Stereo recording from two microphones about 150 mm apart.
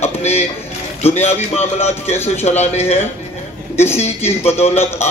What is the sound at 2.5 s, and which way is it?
Speech, 45° left (ahead or behind).